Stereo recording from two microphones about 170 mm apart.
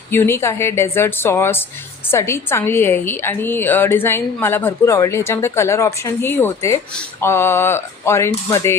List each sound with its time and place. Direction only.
0.1 s a woman's voice: 15° left (ahead or behind)